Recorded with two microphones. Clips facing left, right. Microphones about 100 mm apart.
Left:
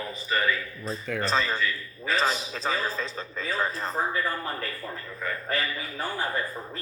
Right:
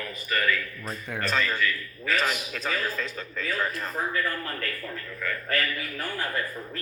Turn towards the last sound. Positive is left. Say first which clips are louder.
# even
turn(degrees=25)  # may be behind; listen again after turning